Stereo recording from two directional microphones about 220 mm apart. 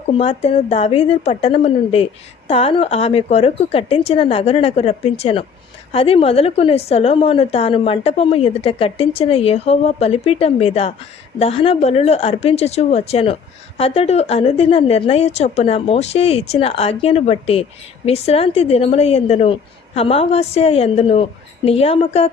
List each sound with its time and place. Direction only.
0.1 s a woman's voice: 25° left (ahead or behind)